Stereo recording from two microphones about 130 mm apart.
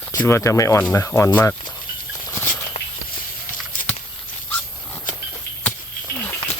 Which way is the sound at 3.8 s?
90° left.